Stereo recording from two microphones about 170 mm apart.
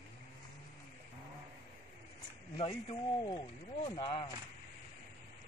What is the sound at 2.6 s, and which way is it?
Speech, 35° left (ahead or behind).